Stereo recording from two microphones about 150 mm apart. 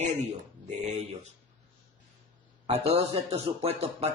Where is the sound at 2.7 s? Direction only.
45° right (ahead or behind).